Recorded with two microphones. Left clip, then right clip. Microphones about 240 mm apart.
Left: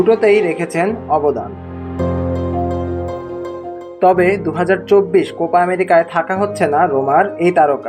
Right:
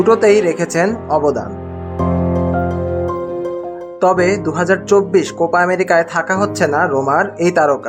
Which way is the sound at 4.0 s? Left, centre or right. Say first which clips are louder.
Left 1 dB; centre.